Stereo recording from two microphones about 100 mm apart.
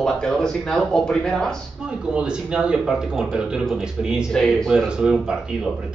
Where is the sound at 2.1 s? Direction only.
10° right (ahead or behind).